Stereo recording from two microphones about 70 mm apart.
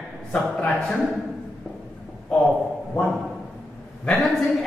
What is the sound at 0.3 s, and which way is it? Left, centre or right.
Speech, centre.